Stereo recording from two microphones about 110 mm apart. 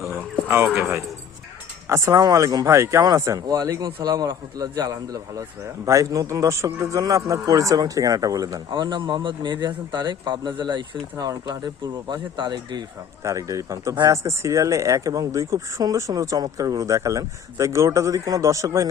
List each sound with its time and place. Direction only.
0.0 s a sound: 20° right (ahead or behind)
1.9 s speech: 30° right (ahead or behind)
8.7 s speech: 45° right (ahead or behind); by 18.9 s 30° right (ahead or behind)